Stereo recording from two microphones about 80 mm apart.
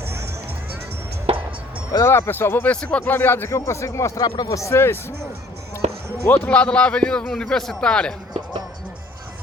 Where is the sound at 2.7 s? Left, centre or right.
Centre; by 5.0 s left.